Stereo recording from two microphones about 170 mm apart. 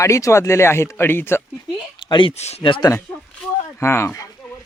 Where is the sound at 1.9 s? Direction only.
25° left (ahead or behind).